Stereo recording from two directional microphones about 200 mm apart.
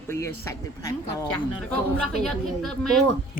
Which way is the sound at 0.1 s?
15° left (ahead or behind).